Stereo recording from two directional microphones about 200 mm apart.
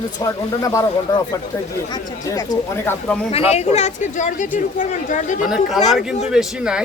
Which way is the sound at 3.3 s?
30° left (ahead or behind).